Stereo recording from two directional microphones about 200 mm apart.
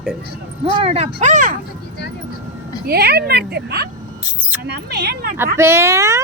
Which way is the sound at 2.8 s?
55° right (ahead or behind).